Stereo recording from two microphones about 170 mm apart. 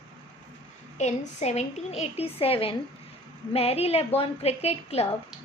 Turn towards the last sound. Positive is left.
turn(degrees=35)  # may be behind; listen again after turning